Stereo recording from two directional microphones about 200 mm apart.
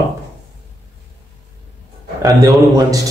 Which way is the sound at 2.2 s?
20° right (ahead or behind).